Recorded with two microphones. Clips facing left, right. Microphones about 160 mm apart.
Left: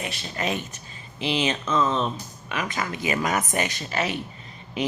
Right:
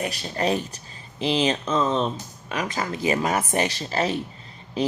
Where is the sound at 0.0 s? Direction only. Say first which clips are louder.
Right 4 dB; 35° right (ahead or behind).